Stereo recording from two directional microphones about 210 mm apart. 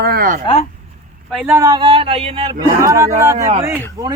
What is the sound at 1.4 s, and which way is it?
Speech, 15° right (ahead or behind).